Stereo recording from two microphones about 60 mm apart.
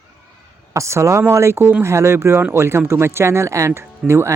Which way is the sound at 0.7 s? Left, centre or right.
Right.